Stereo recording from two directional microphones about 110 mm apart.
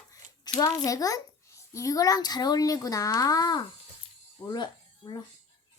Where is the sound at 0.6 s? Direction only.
30° left (ahead or behind).